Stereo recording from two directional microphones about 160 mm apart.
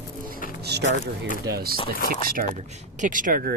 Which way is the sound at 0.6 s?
90° right.